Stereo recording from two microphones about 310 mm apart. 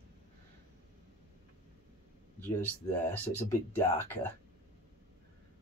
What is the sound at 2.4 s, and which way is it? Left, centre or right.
Speech, centre.